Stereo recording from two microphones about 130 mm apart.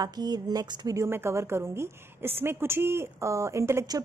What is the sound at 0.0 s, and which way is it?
Speech, 30° right (ahead or behind).